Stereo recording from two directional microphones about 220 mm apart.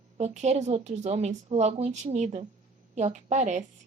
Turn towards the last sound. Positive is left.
turn(degrees=-30)  # may be behind; listen again after turning